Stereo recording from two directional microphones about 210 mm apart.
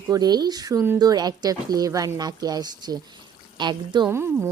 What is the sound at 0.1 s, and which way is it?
Speech, 20° right (ahead or behind).